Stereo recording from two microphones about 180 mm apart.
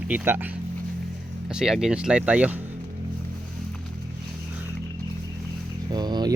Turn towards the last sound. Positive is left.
turn(degrees=-25)  # may be behind; listen again after turning